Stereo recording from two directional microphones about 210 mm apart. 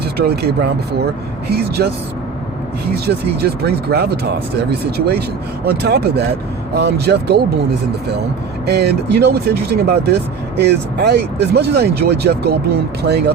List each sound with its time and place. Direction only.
0.2 s speech: 50° right (ahead or behind)
2.9 s speech: 50° right (ahead or behind)
8.6 s speech: 50° right (ahead or behind)